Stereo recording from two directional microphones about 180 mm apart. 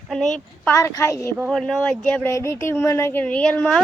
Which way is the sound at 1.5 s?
Centre (ahead or behind).